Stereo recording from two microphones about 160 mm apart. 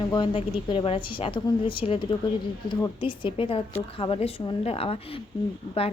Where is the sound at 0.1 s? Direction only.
30° left (ahead or behind).